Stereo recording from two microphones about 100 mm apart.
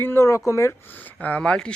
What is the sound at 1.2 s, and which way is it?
Speech, 10° left (ahead or behind).